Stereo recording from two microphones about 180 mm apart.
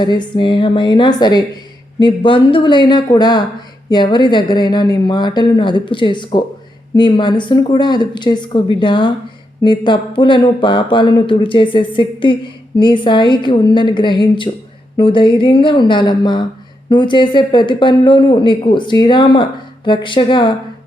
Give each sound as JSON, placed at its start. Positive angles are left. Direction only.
{"t": 0.0, "sound": "speech", "side_deg": 25}